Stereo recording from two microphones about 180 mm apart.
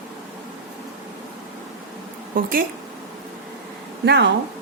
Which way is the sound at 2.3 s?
50° right (ahead or behind).